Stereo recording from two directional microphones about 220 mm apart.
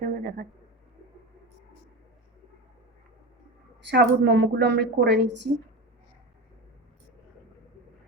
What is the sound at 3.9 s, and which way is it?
A woman's voice, 55° right (ahead or behind).